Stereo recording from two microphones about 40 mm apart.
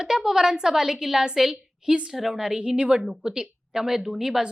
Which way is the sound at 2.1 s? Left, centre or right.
Centre.